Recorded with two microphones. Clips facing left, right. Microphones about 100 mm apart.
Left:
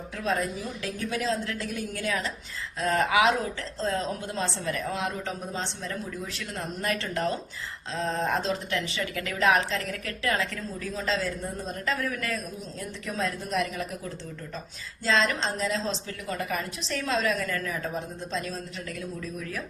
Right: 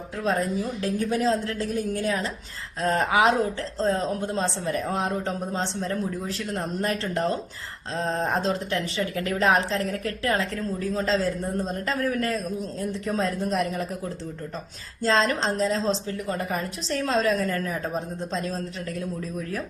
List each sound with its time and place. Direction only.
0.8 s a woman's voice: 30° right (ahead or behind)
5.8 s speech: 35° right (ahead or behind)
15.0 s speech: 35° right (ahead or behind)